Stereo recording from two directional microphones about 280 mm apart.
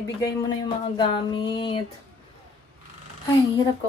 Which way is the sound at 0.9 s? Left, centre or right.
Centre.